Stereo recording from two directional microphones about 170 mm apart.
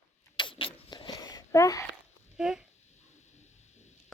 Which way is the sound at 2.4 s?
5° right (ahead or behind).